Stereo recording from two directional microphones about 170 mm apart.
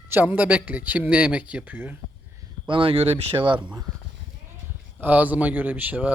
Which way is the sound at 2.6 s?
30° right (ahead or behind).